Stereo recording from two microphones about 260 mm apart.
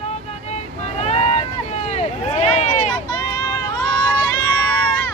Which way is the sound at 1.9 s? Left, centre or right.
Left.